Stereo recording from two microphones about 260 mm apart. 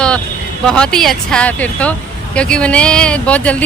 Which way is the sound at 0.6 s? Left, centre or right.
Centre.